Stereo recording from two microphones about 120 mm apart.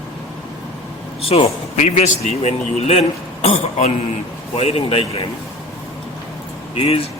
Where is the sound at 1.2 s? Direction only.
55° left (ahead or behind).